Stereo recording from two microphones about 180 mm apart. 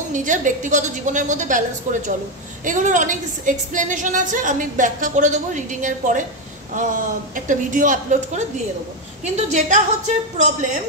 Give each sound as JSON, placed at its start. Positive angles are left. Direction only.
{"t": 0.1, "sound": "a woman's voice", "side_deg": -45}